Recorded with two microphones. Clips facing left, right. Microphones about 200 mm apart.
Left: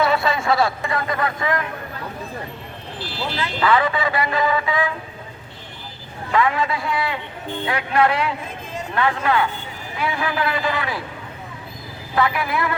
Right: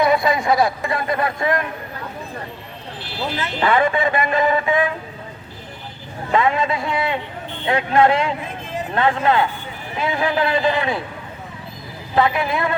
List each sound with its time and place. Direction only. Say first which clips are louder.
0.0 s speech: right 2 dB; 15° right (ahead or behind)
3.6 s speech: right 2 dB; 25° right (ahead or behind)
6.3 s speech: right 2 dB; 25° right (ahead or behind)
12.1 s speech: right 3 dB; 25° right (ahead or behind)